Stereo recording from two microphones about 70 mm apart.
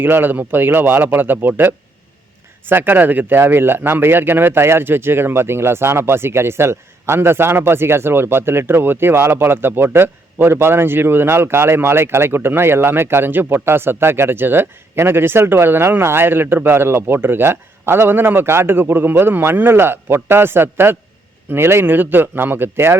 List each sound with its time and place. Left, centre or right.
0.0 s a man's voice: right